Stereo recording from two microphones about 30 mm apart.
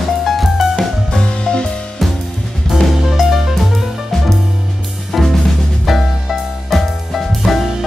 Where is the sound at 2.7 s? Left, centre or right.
Centre.